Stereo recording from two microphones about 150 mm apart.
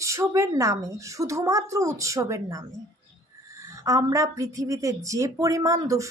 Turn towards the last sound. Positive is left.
turn(degrees=-20)  # may be behind; listen again after turning